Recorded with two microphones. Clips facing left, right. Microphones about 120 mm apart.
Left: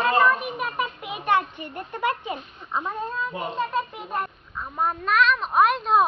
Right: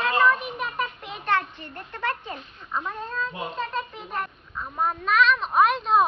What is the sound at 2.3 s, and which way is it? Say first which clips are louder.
Speech: left 3 dB; 15° left (ahead or behind).